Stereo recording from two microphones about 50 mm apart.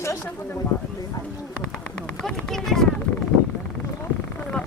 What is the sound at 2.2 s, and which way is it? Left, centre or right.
Speech, centre.